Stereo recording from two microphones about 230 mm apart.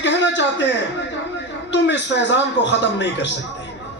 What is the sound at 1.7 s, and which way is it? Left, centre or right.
A man's voice, left.